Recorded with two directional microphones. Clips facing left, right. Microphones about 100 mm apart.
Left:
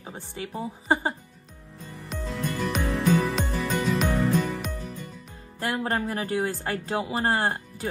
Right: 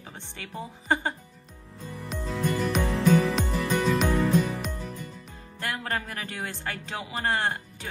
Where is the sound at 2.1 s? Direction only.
Centre (ahead or behind).